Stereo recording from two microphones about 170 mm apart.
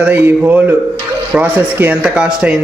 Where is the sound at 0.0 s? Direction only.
10° right (ahead or behind).